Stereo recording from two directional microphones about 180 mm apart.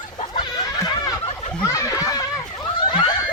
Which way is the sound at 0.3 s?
25° left (ahead or behind).